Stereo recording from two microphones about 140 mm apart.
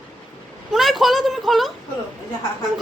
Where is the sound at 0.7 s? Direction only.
Centre (ahead or behind).